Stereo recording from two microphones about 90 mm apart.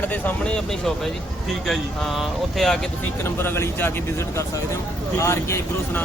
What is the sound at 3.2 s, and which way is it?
Speech, 25° left (ahead or behind).